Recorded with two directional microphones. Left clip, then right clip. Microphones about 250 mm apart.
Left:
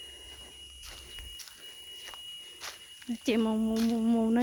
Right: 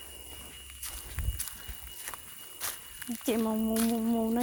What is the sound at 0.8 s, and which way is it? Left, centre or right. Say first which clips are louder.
Walk: right 1 dB; right.